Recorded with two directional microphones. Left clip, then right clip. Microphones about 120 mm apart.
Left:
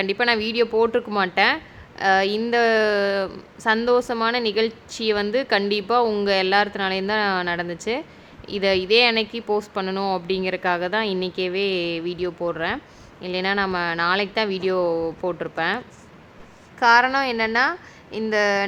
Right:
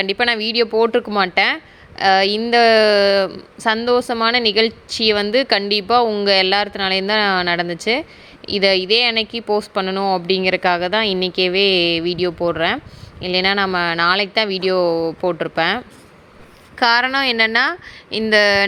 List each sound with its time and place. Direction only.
0.0 s a woman's voice: 30° right (ahead or behind)
10.2 s a woman's voice: 30° right (ahead or behind)
16.7 s a woman's voice: 45° right (ahead or behind)